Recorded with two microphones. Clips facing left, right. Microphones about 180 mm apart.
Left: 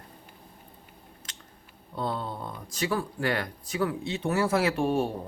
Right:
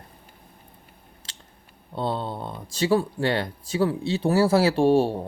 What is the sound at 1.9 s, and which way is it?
Speech, 30° right (ahead or behind).